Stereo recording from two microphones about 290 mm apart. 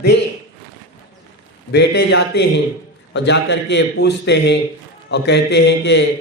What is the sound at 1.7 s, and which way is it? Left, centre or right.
Speech, left.